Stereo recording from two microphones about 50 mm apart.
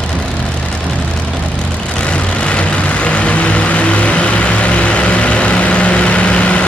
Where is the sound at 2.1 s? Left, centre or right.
Left.